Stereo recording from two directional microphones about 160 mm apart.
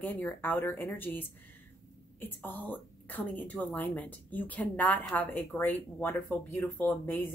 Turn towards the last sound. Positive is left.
turn(degrees=10)  # may be behind; listen again after turning